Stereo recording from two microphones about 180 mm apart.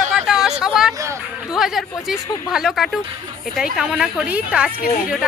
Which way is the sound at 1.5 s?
Centre (ahead or behind).